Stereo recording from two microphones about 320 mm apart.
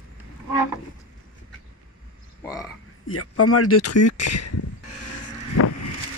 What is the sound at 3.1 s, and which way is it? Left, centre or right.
Speech, left.